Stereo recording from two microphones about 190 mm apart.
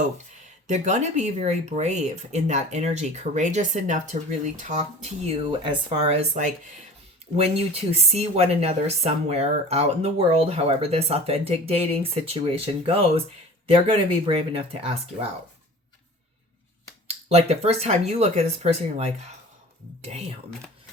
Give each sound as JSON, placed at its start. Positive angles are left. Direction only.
{"t": 0.7, "sound": "speech", "side_deg": -40}
{"t": 17.1, "sound": "speech", "side_deg": -35}